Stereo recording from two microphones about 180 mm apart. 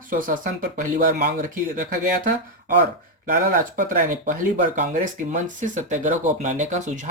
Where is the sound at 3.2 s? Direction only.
50° right (ahead or behind).